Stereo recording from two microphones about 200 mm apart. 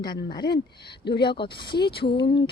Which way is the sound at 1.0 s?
55° left (ahead or behind).